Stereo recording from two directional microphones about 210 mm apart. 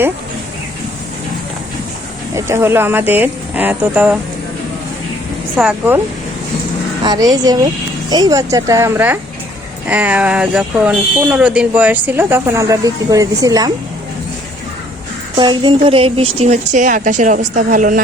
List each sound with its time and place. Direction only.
2.3 s speech: 10° right (ahead or behind)
5.5 s speech: 5° right (ahead or behind)
7.0 s speech: 20° right (ahead or behind)
15.4 s speech: 20° right (ahead or behind); by 18.0 s 40° right (ahead or behind)